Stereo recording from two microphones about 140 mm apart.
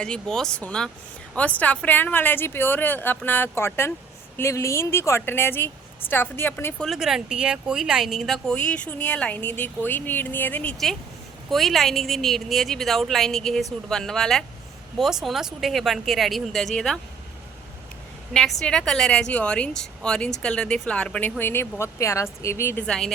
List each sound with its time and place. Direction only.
0.0 s speech: 5° left (ahead or behind)
6.8 s a woman's voice: centre (ahead or behind)
18.6 s speech: 5° left (ahead or behind)
22.9 s a woman's voice: 5° left (ahead or behind)